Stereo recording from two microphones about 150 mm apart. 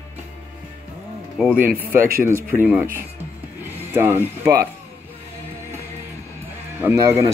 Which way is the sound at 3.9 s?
15° right (ahead or behind).